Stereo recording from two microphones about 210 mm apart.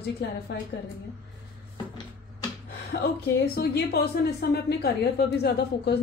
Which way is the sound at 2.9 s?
50° left (ahead or behind).